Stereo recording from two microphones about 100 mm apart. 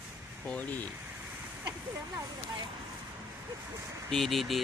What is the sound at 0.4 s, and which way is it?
Speech, 15° left (ahead or behind).